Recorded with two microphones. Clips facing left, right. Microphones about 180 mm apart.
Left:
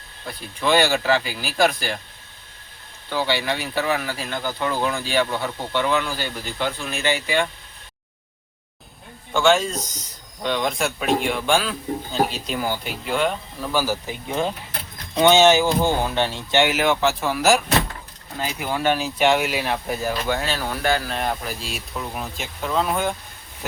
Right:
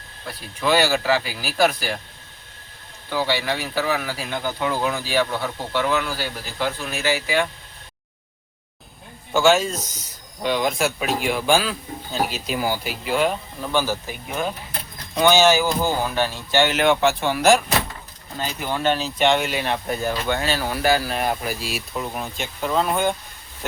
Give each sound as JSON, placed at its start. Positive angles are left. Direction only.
{"t": 0.3, "sound": "speech", "side_deg": -5}
{"t": 3.1, "sound": "speech", "side_deg": 0}
{"t": 9.3, "sound": "speech", "side_deg": -5}
{"t": 14.1, "sound": "speech", "side_deg": 25}
{"t": 16.6, "sound": "speech", "side_deg": 5}